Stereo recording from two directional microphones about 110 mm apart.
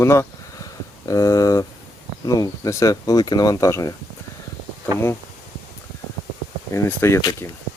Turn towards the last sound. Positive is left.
turn(degrees=25)  # may be behind; listen again after turning